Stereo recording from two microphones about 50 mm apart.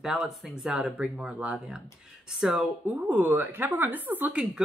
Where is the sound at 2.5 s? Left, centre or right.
Right.